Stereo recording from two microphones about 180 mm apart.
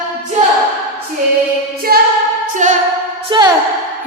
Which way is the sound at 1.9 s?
60° right (ahead or behind).